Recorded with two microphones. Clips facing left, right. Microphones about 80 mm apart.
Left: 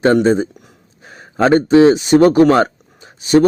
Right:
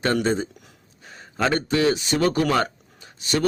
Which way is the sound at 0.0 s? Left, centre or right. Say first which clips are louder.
Left 10 dB; left.